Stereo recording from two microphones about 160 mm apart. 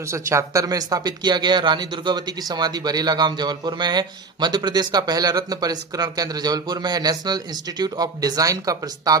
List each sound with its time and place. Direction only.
0.1 s speech: 20° right (ahead or behind)